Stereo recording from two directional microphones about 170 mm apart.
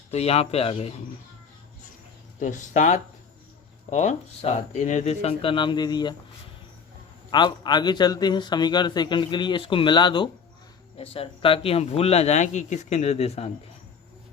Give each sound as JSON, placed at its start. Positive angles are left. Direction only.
{"t": 0.1, "sound": "speech", "side_deg": 35}
{"t": 2.4, "sound": "speech", "side_deg": 45}
{"t": 7.3, "sound": "a man's voice", "side_deg": 25}